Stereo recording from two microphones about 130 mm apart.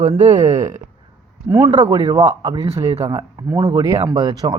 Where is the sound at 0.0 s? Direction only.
65° right (ahead or behind).